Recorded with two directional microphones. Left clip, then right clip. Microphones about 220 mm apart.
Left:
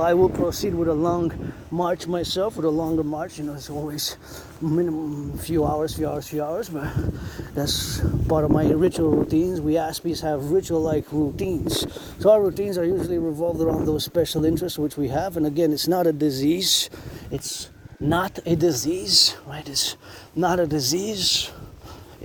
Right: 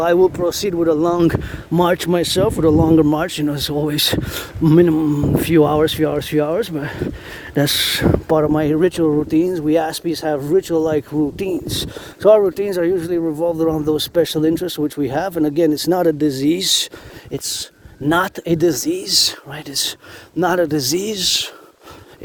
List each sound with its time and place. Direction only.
0.0 s speech: 45° right (ahead or behind)
1.7 s a man's voice: 70° right (ahead or behind)
2.0 s speech: 30° right (ahead or behind)
3.2 s a man's voice: 70° right (ahead or behind)
4.6 s speech: 50° right (ahead or behind)
5.0 s speech: 65° right (ahead or behind)
5.5 s speech: 40° right (ahead or behind)
6.6 s speech: 30° right (ahead or behind)
7.5 s speech: 60° right (ahead or behind)
8.3 s speech: 40° right (ahead or behind)